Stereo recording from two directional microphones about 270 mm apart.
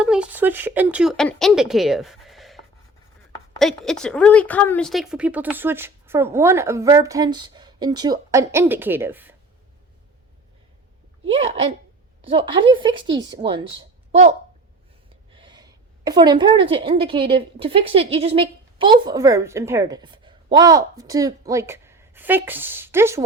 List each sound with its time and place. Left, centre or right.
0.0 s speech: centre
3.6 s speech: centre
11.3 s a woman's voice: right